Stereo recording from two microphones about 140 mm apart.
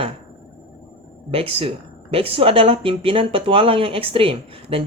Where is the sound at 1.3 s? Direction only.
40° right (ahead or behind).